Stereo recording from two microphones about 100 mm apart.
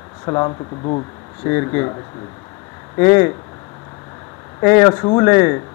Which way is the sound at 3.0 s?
25° left (ahead or behind).